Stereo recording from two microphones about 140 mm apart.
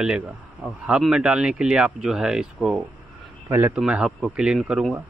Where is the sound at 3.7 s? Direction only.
5° right (ahead or behind).